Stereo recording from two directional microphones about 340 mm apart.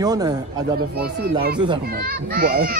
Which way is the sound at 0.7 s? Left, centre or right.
Right.